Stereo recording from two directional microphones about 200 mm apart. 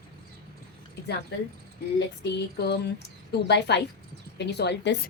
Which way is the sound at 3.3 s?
55° left (ahead or behind).